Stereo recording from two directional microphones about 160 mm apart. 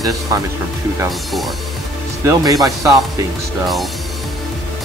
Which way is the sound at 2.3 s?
20° right (ahead or behind).